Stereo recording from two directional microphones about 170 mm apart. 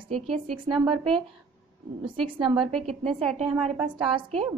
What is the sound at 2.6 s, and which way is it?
Speech, centre (ahead or behind).